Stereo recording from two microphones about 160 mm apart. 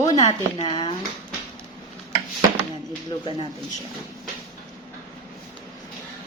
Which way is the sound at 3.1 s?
30° left (ahead or behind).